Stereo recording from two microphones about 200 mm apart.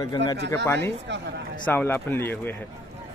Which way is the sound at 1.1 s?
60° right (ahead or behind).